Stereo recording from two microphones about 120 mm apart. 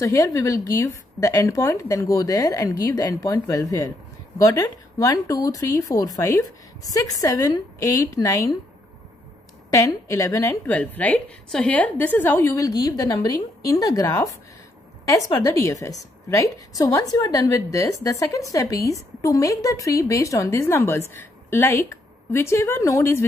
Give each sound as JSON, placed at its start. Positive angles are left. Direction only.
{"t": 0.0, "sound": "a woman's voice", "side_deg": 30}
{"t": 9.7, "sound": "a woman's voice", "side_deg": 25}
{"t": 10.6, "sound": "a woman's voice", "side_deg": 15}
{"t": 12.4, "sound": "a woman's voice", "side_deg": 30}